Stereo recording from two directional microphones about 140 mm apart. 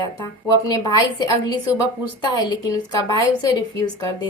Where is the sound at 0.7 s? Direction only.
30° left (ahead or behind).